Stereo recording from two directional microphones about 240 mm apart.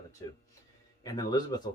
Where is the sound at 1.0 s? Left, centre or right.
Centre.